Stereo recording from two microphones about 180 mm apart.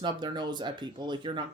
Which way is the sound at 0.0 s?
25° right (ahead or behind).